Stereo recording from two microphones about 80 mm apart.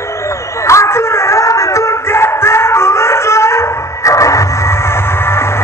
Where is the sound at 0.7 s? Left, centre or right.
Left.